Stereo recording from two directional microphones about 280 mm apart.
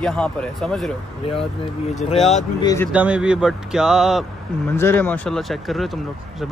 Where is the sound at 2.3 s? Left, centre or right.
Centre.